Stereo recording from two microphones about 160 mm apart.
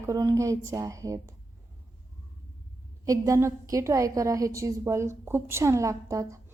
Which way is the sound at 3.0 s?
20° right (ahead or behind).